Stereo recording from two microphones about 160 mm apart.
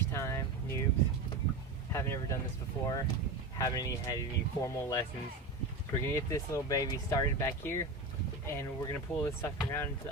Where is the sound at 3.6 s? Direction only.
25° left (ahead or behind).